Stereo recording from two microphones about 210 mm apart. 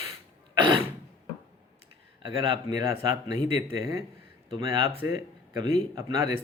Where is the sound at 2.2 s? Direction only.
25° right (ahead or behind).